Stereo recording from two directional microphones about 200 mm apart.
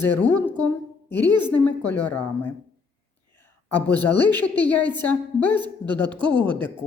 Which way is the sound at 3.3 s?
10° left (ahead or behind).